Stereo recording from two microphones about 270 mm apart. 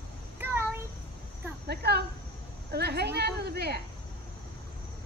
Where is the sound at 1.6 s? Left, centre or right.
Right.